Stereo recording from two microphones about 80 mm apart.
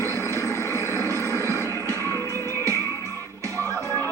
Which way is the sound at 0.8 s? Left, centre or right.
Left.